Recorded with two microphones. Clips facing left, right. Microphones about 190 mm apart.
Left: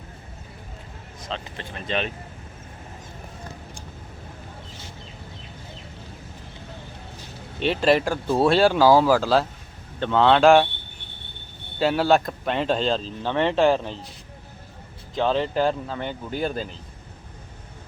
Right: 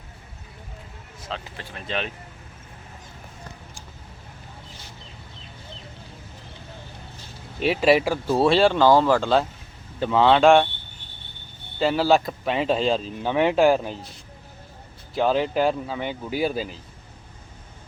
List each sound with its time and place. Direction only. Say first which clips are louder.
1.3 s speech: left 1 dB; 5° right (ahead or behind)
7.6 s speech: right 1 dB; 5° right (ahead or behind)
11.8 s speech: even; centre (ahead or behind)
15.1 s speech: right 1 dB; 5° right (ahead or behind)